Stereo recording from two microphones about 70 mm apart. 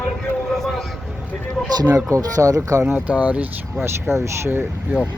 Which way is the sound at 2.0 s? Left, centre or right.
Right.